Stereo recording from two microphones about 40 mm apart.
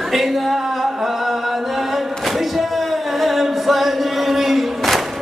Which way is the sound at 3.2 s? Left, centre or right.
Centre.